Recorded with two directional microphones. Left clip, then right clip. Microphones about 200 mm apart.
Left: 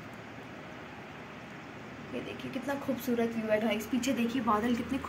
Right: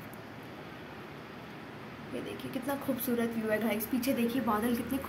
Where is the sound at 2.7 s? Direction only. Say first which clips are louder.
Even; centre (ahead or behind).